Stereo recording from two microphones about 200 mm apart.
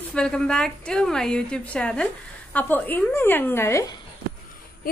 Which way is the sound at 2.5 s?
10° left (ahead or behind).